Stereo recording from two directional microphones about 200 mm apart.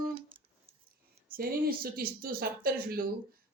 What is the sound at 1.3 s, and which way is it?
Speech, 50° right (ahead or behind).